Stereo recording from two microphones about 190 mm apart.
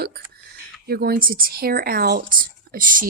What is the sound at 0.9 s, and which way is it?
Speech, 50° right (ahead or behind).